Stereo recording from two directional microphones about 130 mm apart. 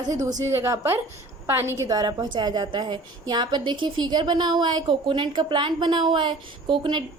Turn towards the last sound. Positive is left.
turn(degrees=-40)  # may be behind; listen again after turning